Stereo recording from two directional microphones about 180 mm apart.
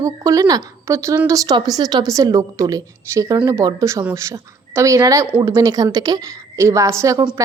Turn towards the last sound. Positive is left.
turn(degrees=-15)  # may be behind; listen again after turning